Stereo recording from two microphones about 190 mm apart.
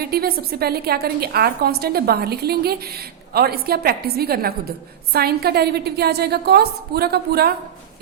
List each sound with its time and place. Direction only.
0.0 s a woman's voice: 55° right (ahead or behind)